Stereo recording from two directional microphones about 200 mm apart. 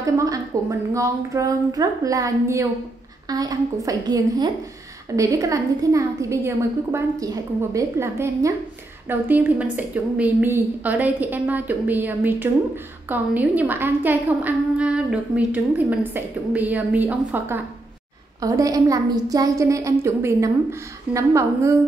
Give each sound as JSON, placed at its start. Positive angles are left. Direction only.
{"t": 0.0, "sound": "a woman's voice", "side_deg": -15}